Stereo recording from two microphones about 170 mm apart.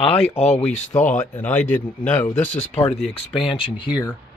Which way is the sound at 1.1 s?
10° left (ahead or behind).